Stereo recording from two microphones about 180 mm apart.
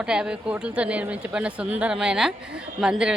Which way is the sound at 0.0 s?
5° right (ahead or behind).